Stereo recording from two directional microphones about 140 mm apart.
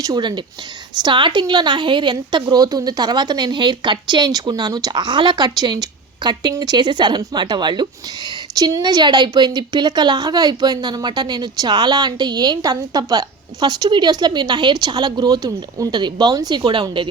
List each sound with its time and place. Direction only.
0.0 s a woman's voice: 30° right (ahead or behind)